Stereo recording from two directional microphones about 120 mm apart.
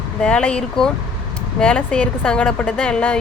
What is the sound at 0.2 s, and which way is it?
Speech, 10° left (ahead or behind).